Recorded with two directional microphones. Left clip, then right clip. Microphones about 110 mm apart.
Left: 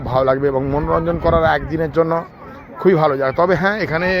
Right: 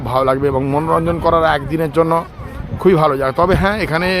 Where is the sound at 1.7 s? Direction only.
20° right (ahead or behind).